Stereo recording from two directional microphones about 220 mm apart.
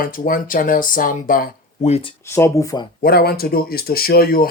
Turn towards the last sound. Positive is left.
turn(degrees=45)  # may be behind; listen again after turning